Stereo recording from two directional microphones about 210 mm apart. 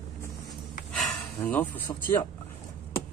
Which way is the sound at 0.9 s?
10° left (ahead or behind).